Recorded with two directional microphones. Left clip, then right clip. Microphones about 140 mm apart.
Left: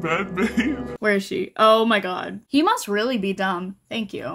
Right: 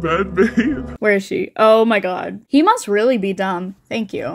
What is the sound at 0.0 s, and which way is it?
Speech, 25° right (ahead or behind).